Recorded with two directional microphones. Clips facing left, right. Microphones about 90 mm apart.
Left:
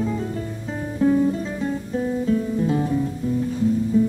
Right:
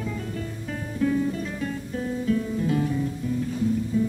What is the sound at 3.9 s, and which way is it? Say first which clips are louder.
Music: left 6 dB; 30° left (ahead or behind).